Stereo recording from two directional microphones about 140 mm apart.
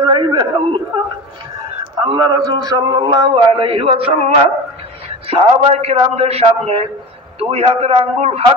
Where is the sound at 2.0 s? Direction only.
30° right (ahead or behind).